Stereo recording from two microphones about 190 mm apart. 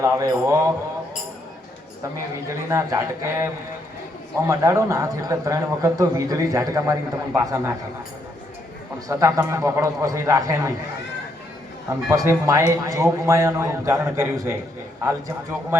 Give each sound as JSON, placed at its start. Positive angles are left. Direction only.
{"t": 0.0, "sound": "a man's voice", "side_deg": -15}
{"t": 2.5, "sound": "a man's voice", "side_deg": -15}
{"t": 9.0, "sound": "a man's voice", "side_deg": -15}
{"t": 12.1, "sound": "a man's voice", "side_deg": -15}